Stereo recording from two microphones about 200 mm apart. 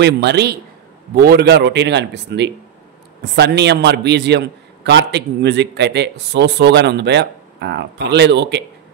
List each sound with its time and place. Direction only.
0.0 s a man's voice: 55° right (ahead or behind)